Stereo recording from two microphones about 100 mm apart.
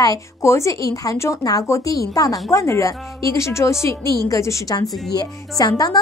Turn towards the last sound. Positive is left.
turn(degrees=40)  # may be behind; listen again after turning